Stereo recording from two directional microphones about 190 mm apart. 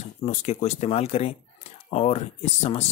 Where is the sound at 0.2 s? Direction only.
35° left (ahead or behind).